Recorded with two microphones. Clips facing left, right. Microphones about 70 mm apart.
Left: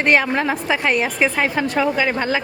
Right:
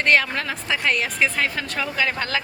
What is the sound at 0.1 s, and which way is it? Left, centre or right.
A woman's voice, centre.